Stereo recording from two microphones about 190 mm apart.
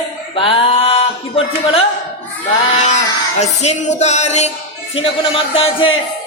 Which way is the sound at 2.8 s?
35° left (ahead or behind).